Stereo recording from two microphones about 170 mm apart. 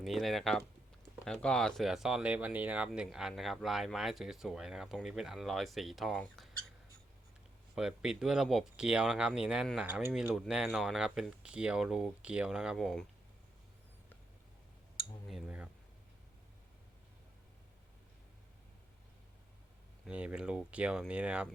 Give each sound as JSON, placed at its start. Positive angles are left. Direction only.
{"t": 0.0, "sound": "speech", "side_deg": 0}
{"t": 7.8, "sound": "speech", "side_deg": -5}
{"t": 15.3, "sound": "a sound", "side_deg": -5}
{"t": 20.1, "sound": "speech", "side_deg": -5}